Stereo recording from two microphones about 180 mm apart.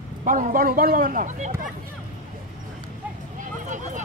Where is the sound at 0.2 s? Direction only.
50° right (ahead or behind).